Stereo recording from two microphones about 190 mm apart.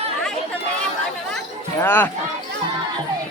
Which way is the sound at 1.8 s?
10° left (ahead or behind).